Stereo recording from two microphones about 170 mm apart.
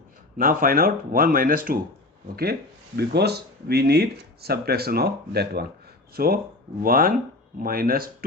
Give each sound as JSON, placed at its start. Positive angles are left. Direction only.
{"t": 0.3, "sound": "speech", "side_deg": -55}